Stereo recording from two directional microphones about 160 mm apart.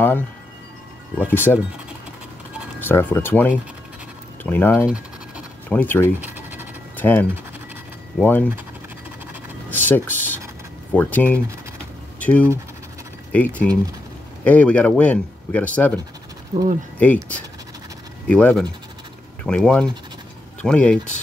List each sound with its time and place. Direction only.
1.2 s speech: 15° left (ahead or behind)
2.8 s speech: 15° left (ahead or behind)
6.2 s scratch: 10° right (ahead or behind)
7.0 s speech: 10° left (ahead or behind)
9.7 s speech: 10° left (ahead or behind)
16.5 s speech: 25° right (ahead or behind)
17.0 s speech: 10° left (ahead or behind)
18.2 s speech: 5° left (ahead or behind)